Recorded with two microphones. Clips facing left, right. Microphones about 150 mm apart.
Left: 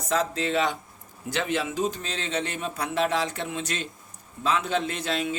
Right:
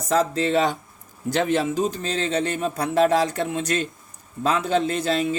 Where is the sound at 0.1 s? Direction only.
40° right (ahead or behind).